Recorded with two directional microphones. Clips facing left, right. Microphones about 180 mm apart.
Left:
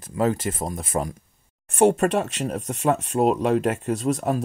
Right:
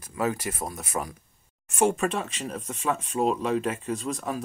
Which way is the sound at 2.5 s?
40° left (ahead or behind).